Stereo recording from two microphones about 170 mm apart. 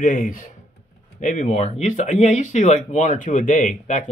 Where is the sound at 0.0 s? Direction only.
50° left (ahead or behind).